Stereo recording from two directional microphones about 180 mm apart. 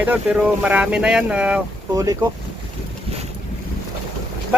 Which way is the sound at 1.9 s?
20° right (ahead or behind).